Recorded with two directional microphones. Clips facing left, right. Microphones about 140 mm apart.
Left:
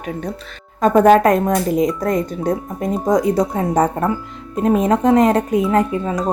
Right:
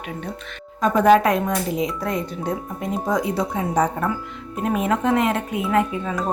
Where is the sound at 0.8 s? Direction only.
50° left (ahead or behind).